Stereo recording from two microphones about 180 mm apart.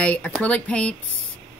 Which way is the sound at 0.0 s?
5° left (ahead or behind).